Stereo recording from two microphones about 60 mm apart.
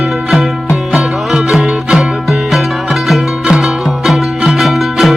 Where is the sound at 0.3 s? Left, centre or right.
Centre.